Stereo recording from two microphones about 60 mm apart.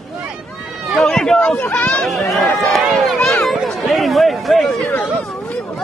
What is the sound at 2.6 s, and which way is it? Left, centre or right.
Run, centre.